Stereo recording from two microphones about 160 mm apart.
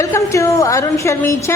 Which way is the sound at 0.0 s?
20° left (ahead or behind).